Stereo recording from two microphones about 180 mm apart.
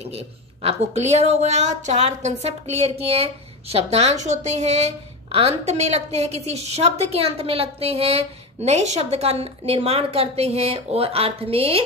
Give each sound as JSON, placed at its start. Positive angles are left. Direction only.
{"t": 0.0, "sound": "a woman's voice", "side_deg": -35}